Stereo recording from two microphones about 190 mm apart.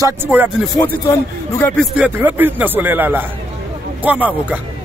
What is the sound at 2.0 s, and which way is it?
Speech, 10° right (ahead or behind).